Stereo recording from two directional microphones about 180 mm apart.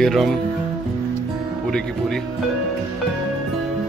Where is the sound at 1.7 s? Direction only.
5° left (ahead or behind).